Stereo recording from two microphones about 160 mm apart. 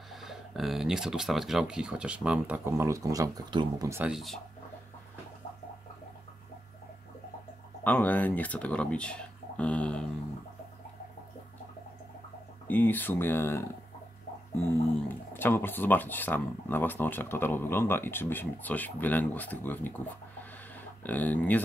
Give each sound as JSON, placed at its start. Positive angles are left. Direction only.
{"t": 0.1, "sound": "speech", "side_deg": 0}
{"t": 3.9, "sound": "speech", "side_deg": -5}
{"t": 7.8, "sound": "speech", "side_deg": 10}
{"t": 12.6, "sound": "speech", "side_deg": 10}
{"t": 15.0, "sound": "speech", "side_deg": 10}
{"t": 20.7, "sound": "a sound", "side_deg": 10}